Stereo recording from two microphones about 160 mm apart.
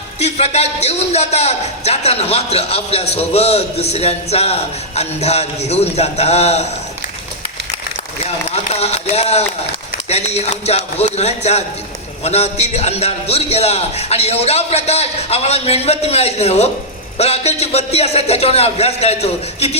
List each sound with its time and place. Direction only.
0.2 s a man's voice: 40° left (ahead or behind)
8.4 s a man's voice: 40° left (ahead or behind)